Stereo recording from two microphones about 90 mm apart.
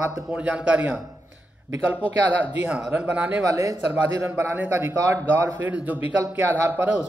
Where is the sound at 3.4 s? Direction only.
40° right (ahead or behind).